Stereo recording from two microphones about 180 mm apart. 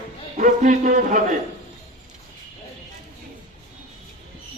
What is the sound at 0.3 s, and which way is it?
Speech, 45° right (ahead or behind).